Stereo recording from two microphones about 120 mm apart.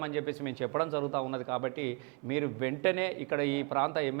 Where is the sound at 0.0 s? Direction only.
20° right (ahead or behind).